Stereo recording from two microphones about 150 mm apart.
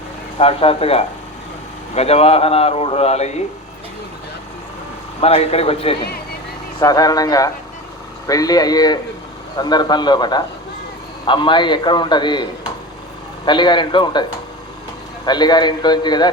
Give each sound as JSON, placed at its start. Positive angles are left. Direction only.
{"t": 0.3, "sound": "a man's voice", "side_deg": 40}
{"t": 5.2, "sound": "a man's voice", "side_deg": 40}
{"t": 6.7, "sound": "a man's voice", "side_deg": 25}